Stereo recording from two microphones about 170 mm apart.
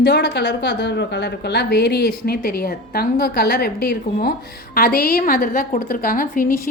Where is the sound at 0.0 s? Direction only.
70° left (ahead or behind).